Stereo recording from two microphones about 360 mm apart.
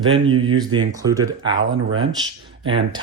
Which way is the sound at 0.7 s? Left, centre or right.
Centre.